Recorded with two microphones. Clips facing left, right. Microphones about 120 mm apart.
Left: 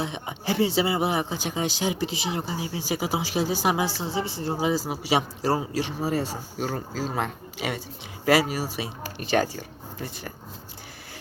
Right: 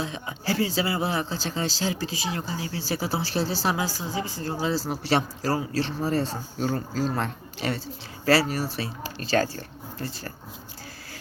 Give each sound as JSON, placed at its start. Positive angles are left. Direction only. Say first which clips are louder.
{"t": 0.0, "sound": "speech", "louder": "left 1 dB", "side_deg": 20}
{"t": 5.4, "sound": "speech", "louder": "left 2 dB", "side_deg": 25}
{"t": 5.7, "sound": "speech", "louder": "right 1 dB", "side_deg": 10}